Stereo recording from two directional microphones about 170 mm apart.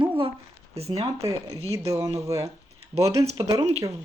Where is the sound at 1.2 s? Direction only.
20° right (ahead or behind).